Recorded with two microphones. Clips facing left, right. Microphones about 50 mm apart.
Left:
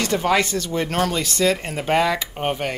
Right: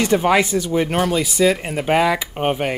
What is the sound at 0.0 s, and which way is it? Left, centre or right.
Speech, centre.